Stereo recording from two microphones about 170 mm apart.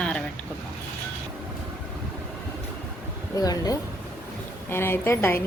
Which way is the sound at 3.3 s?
20° left (ahead or behind).